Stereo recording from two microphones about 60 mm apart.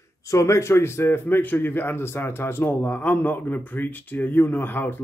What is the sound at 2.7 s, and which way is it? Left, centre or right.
Speech, left.